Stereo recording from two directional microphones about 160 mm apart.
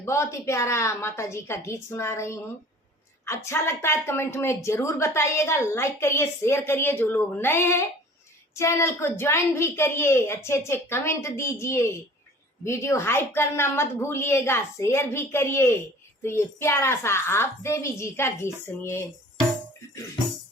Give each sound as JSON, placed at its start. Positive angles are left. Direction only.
{"t": 0.0, "sound": "a woman's voice", "side_deg": 15}